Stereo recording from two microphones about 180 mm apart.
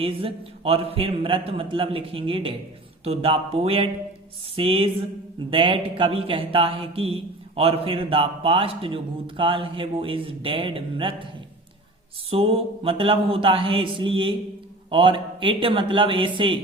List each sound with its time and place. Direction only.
0.0 s a man's voice: 30° right (ahead or behind)
12.3 s a man's voice: 30° right (ahead or behind)